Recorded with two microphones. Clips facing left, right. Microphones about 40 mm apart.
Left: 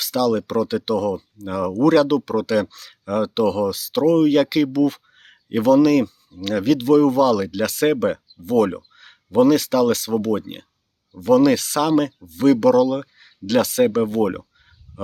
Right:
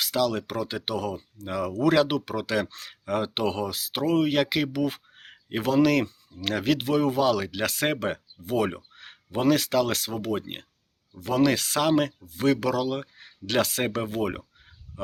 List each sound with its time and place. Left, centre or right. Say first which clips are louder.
0.0 s speech: left 6 dB; centre
15.0 s fowl: left 3 dB; centre